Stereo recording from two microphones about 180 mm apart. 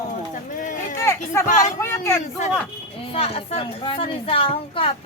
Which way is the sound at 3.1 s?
35° left (ahead or behind).